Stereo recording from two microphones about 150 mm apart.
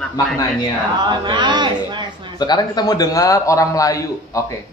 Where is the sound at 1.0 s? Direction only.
30° right (ahead or behind).